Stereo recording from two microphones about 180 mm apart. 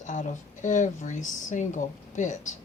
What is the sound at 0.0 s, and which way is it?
Speech, 45° left (ahead or behind).